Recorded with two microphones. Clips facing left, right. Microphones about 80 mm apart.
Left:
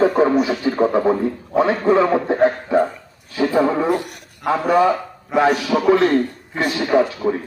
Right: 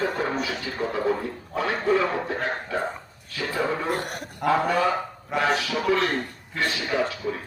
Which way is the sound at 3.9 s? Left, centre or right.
Right.